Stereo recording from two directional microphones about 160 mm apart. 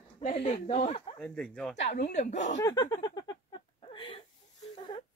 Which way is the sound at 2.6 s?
20° left (ahead or behind).